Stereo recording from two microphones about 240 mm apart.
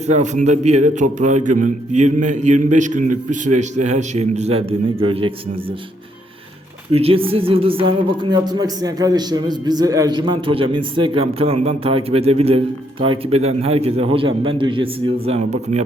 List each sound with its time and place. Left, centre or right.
0.1 s a man's voice: right
6.9 s speech: right